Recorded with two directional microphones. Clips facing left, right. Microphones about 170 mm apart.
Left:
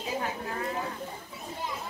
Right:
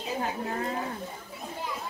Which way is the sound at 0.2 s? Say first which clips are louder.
Right 2 dB; 30° right (ahead or behind).